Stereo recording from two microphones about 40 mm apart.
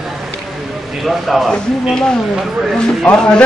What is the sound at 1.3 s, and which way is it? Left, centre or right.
Speech, centre.